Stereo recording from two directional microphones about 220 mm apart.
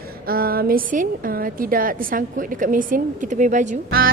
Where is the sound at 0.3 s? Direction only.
40° right (ahead or behind).